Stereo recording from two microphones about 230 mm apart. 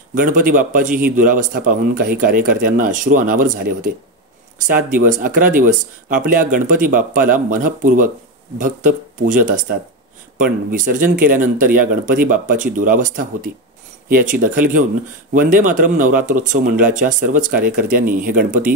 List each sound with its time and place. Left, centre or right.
0.1 s speech: right